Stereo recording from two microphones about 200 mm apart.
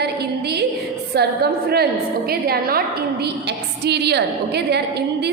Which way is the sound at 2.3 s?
50° right (ahead or behind).